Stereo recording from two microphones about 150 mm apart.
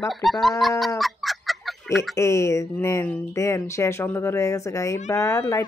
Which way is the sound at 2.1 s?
20° left (ahead or behind).